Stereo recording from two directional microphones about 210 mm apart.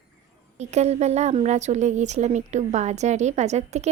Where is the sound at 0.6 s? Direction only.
30° right (ahead or behind).